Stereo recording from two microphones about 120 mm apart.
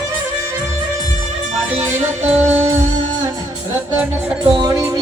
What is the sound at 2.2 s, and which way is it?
Music, 70° right (ahead or behind).